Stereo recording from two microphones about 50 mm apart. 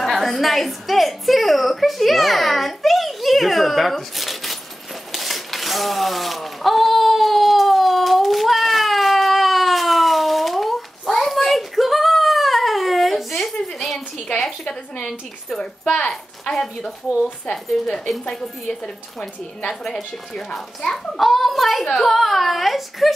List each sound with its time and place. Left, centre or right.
0.0 s speech: centre
5.1 s a sound: centre
14.4 s a woman's voice: centre
20.3 s a child's voice: centre